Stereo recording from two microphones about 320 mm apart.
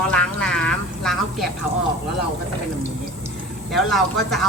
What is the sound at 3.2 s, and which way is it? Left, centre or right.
Speech, centre.